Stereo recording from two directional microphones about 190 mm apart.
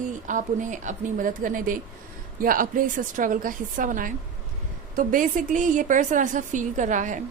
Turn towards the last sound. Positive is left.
turn(degrees=-40)  # may be behind; listen again after turning